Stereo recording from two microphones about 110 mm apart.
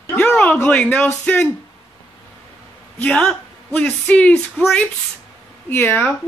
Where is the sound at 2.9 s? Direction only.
10° left (ahead or behind).